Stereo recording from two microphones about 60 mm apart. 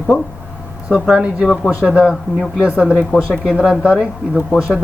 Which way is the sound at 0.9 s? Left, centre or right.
Centre.